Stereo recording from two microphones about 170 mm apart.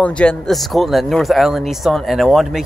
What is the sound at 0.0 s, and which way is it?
Speech, 5° left (ahead or behind).